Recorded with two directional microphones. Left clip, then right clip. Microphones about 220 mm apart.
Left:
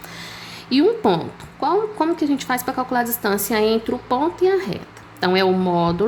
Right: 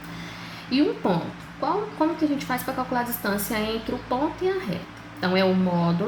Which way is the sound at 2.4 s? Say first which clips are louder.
Left 5 dB; 60° left (ahead or behind).